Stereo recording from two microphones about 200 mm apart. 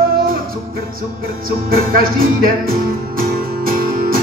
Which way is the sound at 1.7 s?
45° right (ahead or behind).